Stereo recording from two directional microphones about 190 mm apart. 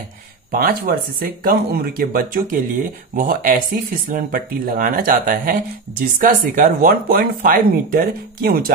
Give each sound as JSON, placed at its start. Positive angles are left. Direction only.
{"t": 0.5, "sound": "speech", "side_deg": -50}